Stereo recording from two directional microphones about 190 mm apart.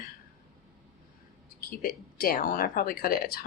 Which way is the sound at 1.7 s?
50° left (ahead or behind).